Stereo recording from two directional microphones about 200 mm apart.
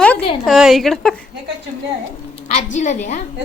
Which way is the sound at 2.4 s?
35° left (ahead or behind).